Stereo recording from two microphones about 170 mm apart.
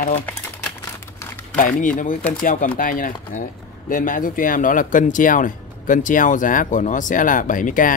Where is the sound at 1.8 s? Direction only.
50° left (ahead or behind).